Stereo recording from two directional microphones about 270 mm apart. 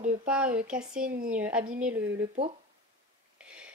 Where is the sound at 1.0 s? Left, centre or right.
Right.